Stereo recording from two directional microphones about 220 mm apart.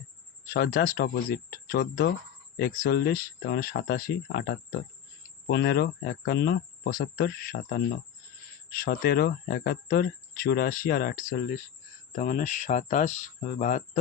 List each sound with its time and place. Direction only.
0.4 s speech: 45° left (ahead or behind)